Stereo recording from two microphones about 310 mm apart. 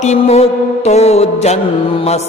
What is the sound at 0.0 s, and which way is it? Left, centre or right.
Mantra, left.